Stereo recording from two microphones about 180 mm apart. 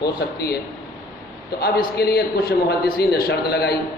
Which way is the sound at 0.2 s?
60° left (ahead or behind).